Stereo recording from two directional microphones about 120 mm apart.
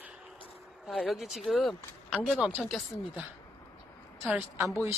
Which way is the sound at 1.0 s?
Centre (ahead or behind).